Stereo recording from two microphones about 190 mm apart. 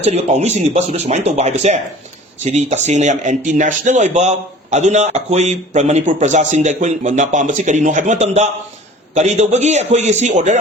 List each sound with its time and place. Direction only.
0.0 s speech: 35° right (ahead or behind)